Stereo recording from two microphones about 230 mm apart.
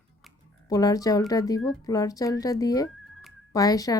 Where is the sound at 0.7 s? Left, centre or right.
Centre.